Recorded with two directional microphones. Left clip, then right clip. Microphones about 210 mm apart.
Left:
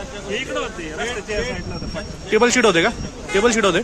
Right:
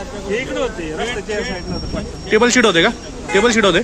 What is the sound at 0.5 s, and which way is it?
Speech, 5° left (ahead or behind).